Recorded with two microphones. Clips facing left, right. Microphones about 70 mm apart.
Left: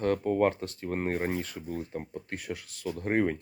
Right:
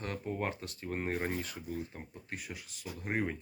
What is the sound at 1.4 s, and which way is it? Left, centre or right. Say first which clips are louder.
Speech: left 4 dB; left.